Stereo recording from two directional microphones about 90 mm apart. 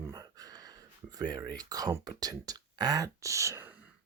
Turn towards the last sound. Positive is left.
turn(degrees=-35)  # may be behind; listen again after turning